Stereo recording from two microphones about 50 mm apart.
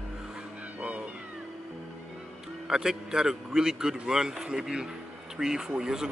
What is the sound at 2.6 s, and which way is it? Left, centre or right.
A man's voice, centre.